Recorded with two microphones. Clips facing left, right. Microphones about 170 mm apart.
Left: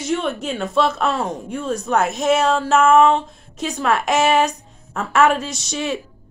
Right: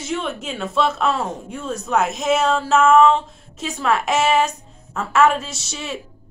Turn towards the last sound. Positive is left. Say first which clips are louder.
# left 6 dB
turn(degrees=-5)  # may be behind; listen again after turning